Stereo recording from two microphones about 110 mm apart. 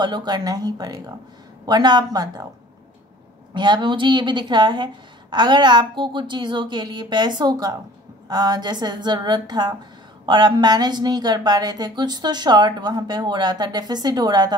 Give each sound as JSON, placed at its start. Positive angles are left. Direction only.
{"t": 0.0, "sound": "speech", "side_deg": -40}
{"t": 3.5, "sound": "a woman's voice", "side_deg": -45}